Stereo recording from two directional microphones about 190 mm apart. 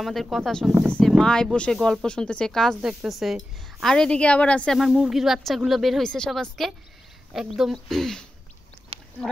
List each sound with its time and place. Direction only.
0.0 s speech: centre (ahead or behind)